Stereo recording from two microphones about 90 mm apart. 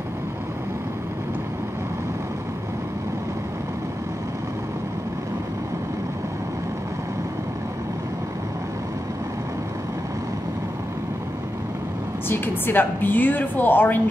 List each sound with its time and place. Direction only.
12.3 s a woman's voice: 25° left (ahead or behind)